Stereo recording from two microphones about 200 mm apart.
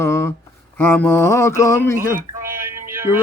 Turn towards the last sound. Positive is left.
turn(degrees=-15)  # may be behind; listen again after turning